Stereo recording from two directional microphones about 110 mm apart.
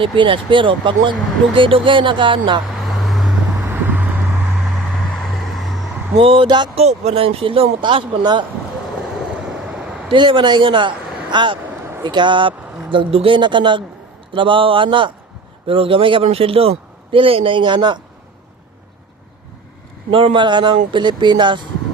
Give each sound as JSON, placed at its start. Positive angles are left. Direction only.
{"t": 0.0, "sound": "a man's voice", "side_deg": -50}
{"t": 2.8, "sound": "vehicle", "side_deg": 0}
{"t": 3.7, "sound": "vehicle", "side_deg": -15}
{"t": 5.1, "sound": "vehicle", "side_deg": 0}
{"t": 6.1, "sound": "a man's voice", "side_deg": -50}
{"t": 6.7, "sound": "speech", "side_deg": -70}
{"t": 9.5, "sound": "a sound", "side_deg": -5}
{"t": 10.1, "sound": "a man's voice", "side_deg": -50}
{"t": 11.7, "sound": "a sound", "side_deg": -20}
{"t": 12.0, "sound": "a man's voice", "side_deg": -45}
{"t": 20.1, "sound": "a man's voice", "side_deg": -55}